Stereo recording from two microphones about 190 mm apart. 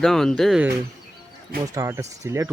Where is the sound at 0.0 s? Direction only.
Centre (ahead or behind).